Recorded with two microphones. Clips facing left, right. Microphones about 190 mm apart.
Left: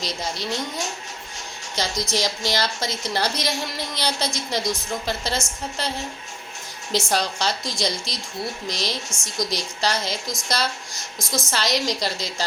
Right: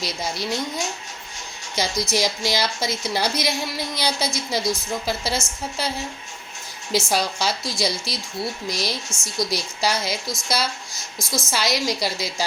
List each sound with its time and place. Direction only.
0.0 s a woman's voice: 10° right (ahead or behind)
1.7 s a woman's voice: 10° right (ahead or behind)
6.9 s a woman's voice: 5° right (ahead or behind)
11.2 s a woman's voice: 15° left (ahead or behind)
11.5 s a woman's voice: 10° right (ahead or behind)